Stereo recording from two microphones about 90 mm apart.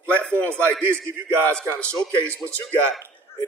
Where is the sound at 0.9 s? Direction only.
25° right (ahead or behind).